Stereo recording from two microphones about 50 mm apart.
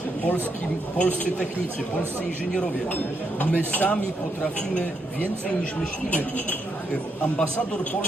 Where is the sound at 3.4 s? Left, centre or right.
Left.